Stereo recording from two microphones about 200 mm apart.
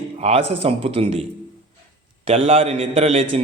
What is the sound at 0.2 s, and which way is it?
A man's voice, 30° right (ahead or behind).